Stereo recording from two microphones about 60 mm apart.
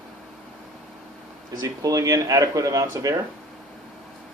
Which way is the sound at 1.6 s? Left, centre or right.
Right.